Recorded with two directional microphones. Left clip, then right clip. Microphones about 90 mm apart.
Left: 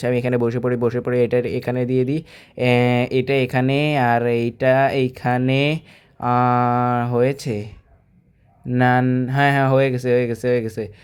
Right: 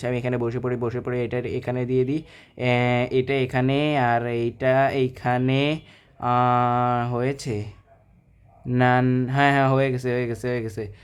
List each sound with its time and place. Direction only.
0.0 s speech: 40° left (ahead or behind)
8.8 s speech: 30° left (ahead or behind)